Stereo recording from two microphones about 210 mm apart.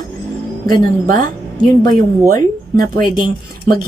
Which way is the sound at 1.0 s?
40° right (ahead or behind).